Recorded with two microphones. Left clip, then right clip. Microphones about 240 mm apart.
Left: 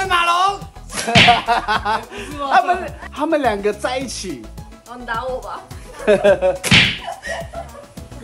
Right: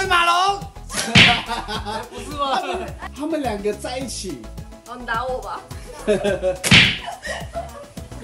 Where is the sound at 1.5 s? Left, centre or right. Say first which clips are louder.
Left 9 dB; centre.